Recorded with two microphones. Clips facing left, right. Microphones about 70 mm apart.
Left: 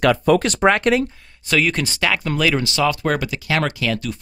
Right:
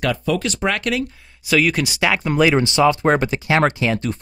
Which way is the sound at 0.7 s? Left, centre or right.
Left.